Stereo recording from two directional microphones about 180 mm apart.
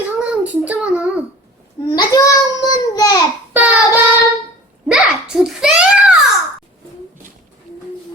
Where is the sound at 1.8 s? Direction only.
20° left (ahead or behind).